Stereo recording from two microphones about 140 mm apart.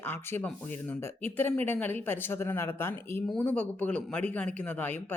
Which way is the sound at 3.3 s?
5° left (ahead or behind).